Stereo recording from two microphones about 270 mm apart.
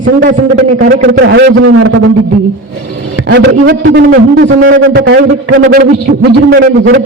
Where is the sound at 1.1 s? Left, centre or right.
Right.